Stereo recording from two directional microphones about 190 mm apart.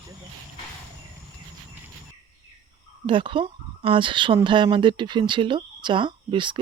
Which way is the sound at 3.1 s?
25° right (ahead or behind).